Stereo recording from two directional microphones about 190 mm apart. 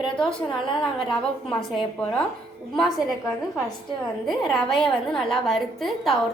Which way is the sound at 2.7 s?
Centre (ahead or behind).